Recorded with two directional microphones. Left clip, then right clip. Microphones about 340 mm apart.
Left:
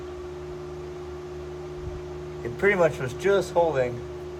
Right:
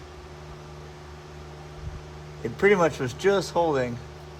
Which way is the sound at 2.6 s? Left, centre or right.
Right.